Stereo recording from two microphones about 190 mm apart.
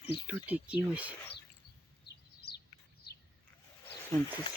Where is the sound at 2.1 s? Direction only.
60° left (ahead or behind).